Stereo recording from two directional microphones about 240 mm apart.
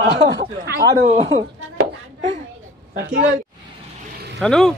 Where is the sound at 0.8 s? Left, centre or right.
Right.